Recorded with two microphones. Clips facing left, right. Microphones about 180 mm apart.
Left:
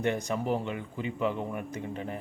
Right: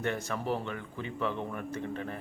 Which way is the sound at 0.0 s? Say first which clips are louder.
Left 4 dB; 15° left (ahead or behind).